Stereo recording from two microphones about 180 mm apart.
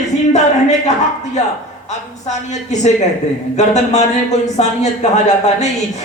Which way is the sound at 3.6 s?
40° left (ahead or behind).